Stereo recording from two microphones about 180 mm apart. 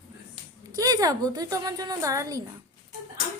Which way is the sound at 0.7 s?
20° right (ahead or behind).